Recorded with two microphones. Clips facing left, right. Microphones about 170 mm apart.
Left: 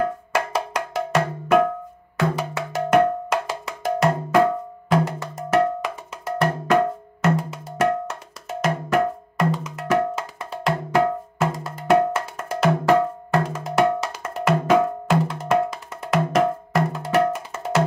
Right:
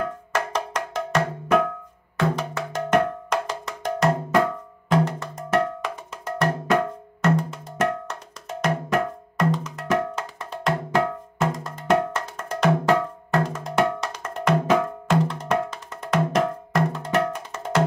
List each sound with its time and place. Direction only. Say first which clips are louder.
0.3 s music: left 2 dB; 10° left (ahead or behind)
2.1 s cowbell: left 1 dB; 5° left (ahead or behind)
15.0 s music: left 1 dB; 5° left (ahead or behind)